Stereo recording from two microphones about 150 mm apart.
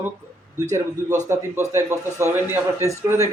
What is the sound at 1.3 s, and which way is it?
A man's voice, 15° right (ahead or behind).